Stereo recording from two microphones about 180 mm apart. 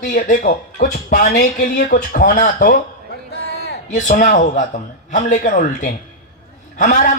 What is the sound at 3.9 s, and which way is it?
A man's voice, 45° left (ahead or behind).